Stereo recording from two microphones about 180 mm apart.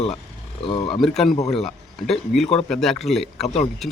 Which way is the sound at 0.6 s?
30° left (ahead or behind).